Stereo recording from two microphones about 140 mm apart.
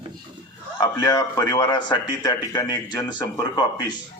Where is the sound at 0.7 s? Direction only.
30° left (ahead or behind).